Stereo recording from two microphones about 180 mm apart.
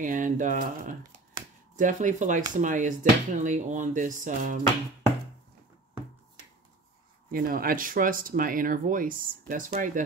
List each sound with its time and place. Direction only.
0.0 s speech: 45° right (ahead or behind)
7.2 s speech: 50° right (ahead or behind)